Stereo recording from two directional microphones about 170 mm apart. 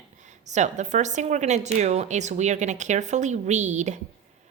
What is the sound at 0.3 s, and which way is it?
A woman's voice, 45° right (ahead or behind).